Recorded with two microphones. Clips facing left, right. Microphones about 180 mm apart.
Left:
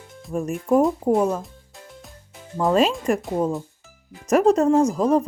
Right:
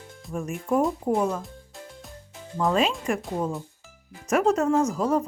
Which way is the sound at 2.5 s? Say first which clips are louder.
Left 4 dB; 40° left (ahead or behind).